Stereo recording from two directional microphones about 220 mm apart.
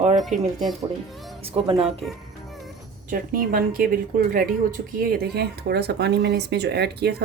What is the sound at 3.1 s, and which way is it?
Speech, 40° right (ahead or behind).